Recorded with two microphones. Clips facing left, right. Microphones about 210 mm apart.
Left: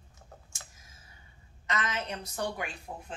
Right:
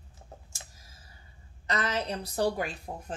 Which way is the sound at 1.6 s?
35° right (ahead or behind).